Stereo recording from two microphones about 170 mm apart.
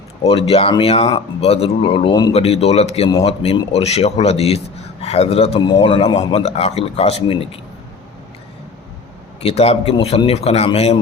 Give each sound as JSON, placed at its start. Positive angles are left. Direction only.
{"t": 0.2, "sound": "a man's voice", "side_deg": 35}
{"t": 9.4, "sound": "a man's voice", "side_deg": 35}